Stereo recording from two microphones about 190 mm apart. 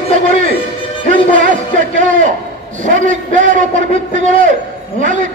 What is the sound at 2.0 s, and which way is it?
A man's voice, 45° right (ahead or behind).